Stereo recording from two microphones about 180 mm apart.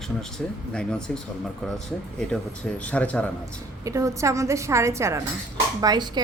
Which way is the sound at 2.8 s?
5° left (ahead or behind).